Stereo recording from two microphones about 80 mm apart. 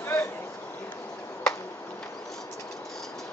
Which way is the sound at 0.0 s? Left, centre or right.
Left.